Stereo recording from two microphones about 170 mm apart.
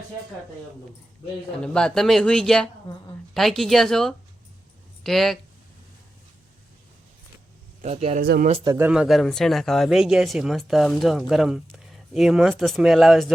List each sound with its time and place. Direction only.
1.5 s speech: 5° left (ahead or behind)
7.8 s speech: 35° right (ahead or behind)
8.2 s speech: 60° right (ahead or behind)
8.6 s speech: 20° right (ahead or behind)
8.9 s speech: 5° right (ahead or behind)